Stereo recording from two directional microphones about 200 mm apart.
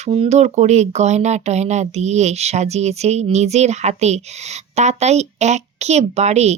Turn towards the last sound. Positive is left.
turn(degrees=-35)  # may be behind; listen again after turning